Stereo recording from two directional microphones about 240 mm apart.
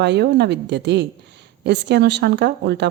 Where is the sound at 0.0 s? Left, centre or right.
Right.